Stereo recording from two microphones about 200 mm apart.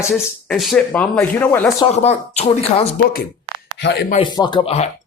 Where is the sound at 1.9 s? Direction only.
35° left (ahead or behind).